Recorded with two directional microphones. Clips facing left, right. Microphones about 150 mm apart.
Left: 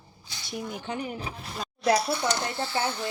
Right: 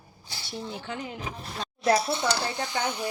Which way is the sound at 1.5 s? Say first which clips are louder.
Even; centre (ahead or behind).